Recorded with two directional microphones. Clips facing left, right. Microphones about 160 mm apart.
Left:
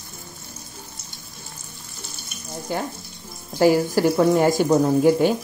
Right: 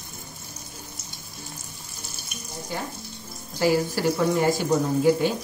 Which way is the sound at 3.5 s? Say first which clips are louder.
Left 5 dB; 50° left (ahead or behind).